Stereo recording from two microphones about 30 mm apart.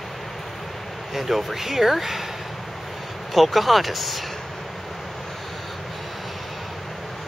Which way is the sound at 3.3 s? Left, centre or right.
Centre.